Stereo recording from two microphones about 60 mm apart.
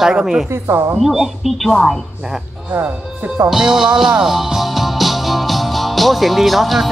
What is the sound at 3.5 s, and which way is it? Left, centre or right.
Music, centre.